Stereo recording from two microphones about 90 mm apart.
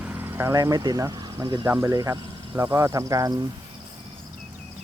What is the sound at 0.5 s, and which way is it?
Speech, 45° right (ahead or behind).